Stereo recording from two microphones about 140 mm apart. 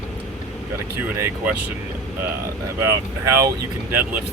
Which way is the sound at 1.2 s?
20° right (ahead or behind).